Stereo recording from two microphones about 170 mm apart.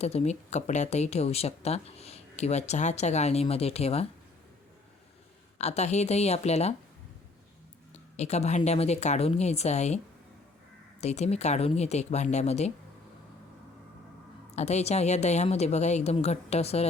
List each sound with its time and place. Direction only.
0.0 s speech: 40° left (ahead or behind)
5.5 s speech: 40° left (ahead or behind)
7.9 s speech: 40° left (ahead or behind)
11.0 s speech: 40° left (ahead or behind)
14.5 s speech: 40° left (ahead or behind)